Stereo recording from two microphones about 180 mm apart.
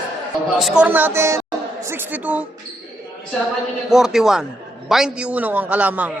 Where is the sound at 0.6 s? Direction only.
5° right (ahead or behind).